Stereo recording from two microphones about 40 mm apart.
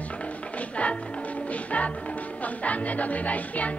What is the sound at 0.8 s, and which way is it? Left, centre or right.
Speech, left.